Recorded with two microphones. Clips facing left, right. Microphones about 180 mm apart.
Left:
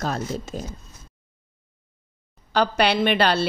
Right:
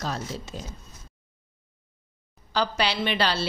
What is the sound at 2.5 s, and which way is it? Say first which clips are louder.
Speech: left 6 dB; 55° left (ahead or behind).